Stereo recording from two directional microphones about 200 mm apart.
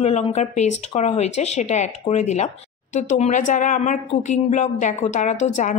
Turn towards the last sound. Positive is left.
turn(degrees=35)  # may be behind; listen again after turning